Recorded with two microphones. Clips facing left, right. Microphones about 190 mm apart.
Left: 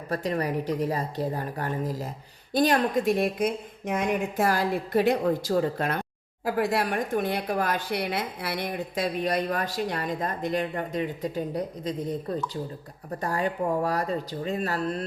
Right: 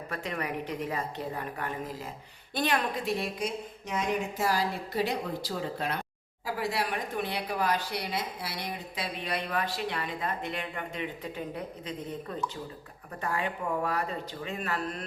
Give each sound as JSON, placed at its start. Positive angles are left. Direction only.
{"t": 0.1, "sound": "speech", "side_deg": 35}